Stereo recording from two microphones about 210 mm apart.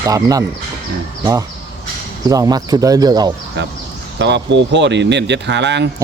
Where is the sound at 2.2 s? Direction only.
15° right (ahead or behind).